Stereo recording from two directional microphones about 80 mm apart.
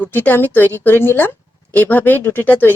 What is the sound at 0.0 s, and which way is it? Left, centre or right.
Speech, left.